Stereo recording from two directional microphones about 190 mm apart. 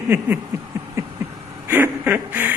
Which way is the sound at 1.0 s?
15° right (ahead or behind).